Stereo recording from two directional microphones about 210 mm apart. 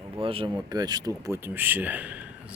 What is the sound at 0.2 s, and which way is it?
Speech, 25° right (ahead or behind).